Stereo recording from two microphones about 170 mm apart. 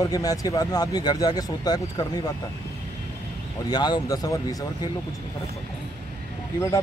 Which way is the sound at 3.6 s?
25° left (ahead or behind).